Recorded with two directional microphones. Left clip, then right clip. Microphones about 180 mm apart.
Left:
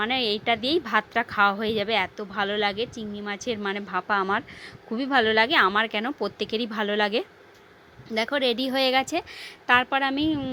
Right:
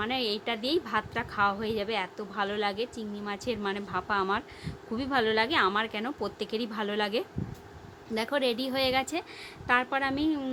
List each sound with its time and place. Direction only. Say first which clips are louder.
0.0 s a woman's voice: left 6 dB; 35° left (ahead or behind)